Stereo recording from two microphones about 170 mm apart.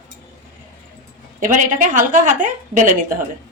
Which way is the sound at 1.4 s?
50° right (ahead or behind).